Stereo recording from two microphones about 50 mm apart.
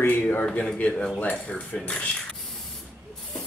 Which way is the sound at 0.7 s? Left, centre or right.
Left.